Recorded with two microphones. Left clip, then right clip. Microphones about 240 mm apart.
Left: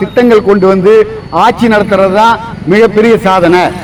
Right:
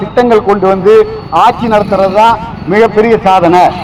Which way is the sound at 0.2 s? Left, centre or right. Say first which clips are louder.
Left 1 dB; left.